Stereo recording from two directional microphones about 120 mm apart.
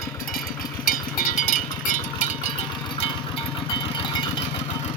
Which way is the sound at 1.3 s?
90° left.